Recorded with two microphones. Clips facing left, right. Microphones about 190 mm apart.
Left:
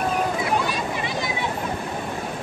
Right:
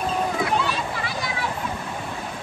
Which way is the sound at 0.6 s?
15° left (ahead or behind).